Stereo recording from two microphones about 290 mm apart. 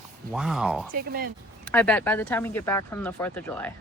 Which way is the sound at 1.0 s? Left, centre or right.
Right.